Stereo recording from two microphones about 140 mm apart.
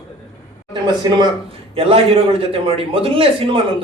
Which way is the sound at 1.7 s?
40° right (ahead or behind).